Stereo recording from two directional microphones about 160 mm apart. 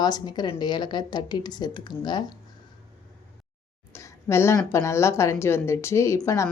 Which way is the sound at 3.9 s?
15° left (ahead or behind).